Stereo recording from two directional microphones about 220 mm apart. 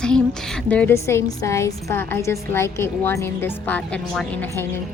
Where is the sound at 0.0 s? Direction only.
5° left (ahead or behind).